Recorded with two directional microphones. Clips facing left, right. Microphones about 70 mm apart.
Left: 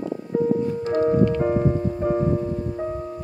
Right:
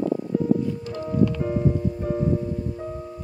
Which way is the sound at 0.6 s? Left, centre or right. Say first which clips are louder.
Left 8 dB; left.